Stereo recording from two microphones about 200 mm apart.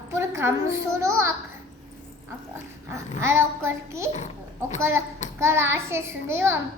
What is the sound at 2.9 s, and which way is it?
A child's voice, 15° right (ahead or behind).